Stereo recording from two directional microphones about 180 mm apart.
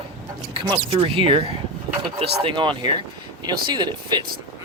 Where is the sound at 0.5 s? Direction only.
30° right (ahead or behind).